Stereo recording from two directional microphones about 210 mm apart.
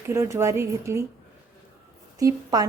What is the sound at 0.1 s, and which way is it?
Speech, 15° right (ahead or behind).